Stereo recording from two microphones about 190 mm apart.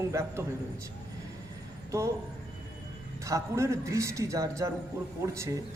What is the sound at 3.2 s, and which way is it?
A man's voice, 15° right (ahead or behind).